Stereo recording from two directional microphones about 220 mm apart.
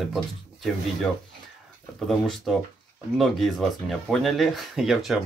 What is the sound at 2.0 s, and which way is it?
Speech, centre (ahead or behind).